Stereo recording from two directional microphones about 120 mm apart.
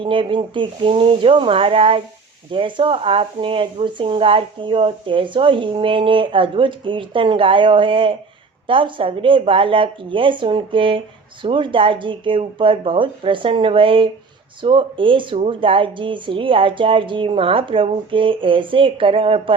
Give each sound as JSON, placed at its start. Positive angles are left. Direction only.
{"t": 0.0, "sound": "speech", "side_deg": -45}